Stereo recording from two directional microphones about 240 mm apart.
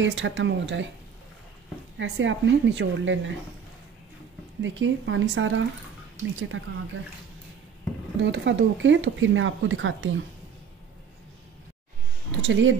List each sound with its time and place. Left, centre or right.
0.0 s speech: right
2.0 s speech: right
4.6 s speech: right
8.2 s speech: right
12.3 s speech: right